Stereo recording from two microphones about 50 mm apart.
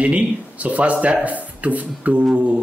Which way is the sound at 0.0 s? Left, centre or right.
Right.